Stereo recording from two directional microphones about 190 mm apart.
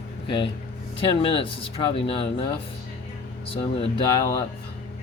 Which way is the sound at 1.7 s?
30° left (ahead or behind).